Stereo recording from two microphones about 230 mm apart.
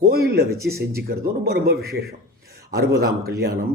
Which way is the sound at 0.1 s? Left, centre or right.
Right.